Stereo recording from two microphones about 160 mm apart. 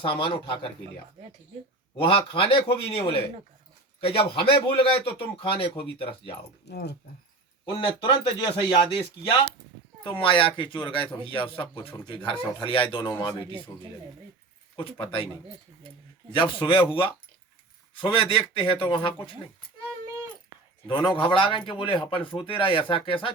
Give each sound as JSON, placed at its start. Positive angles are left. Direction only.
{"t": 0.0, "sound": "speech", "side_deg": 30}
{"t": 2.0, "sound": "speech", "side_deg": 35}
{"t": 6.7, "sound": "speech", "side_deg": 90}
{"t": 7.6, "sound": "speech", "side_deg": 30}
{"t": 10.0, "sound": "speech", "side_deg": 30}
{"t": 13.3, "sound": "speech", "side_deg": -30}
{"t": 14.8, "sound": "speech", "side_deg": 30}
{"t": 16.3, "sound": "speech", "side_deg": 30}
{"t": 20.8, "sound": "speech", "side_deg": 30}